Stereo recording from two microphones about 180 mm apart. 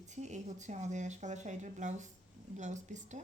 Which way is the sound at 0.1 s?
40° right (ahead or behind).